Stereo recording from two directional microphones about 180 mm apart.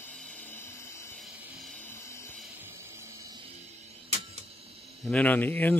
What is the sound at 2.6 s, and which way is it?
Music, 15° right (ahead or behind).